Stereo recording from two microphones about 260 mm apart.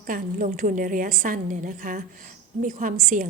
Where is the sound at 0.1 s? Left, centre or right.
Right.